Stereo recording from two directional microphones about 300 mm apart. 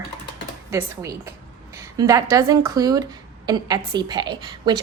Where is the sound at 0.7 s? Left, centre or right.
Centre.